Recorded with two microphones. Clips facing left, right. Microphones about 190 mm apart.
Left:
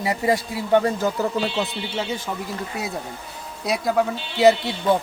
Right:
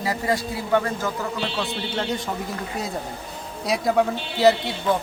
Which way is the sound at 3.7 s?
Centre (ahead or behind).